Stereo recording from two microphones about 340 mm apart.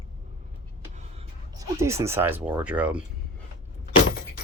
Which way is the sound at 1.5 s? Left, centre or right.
Centre.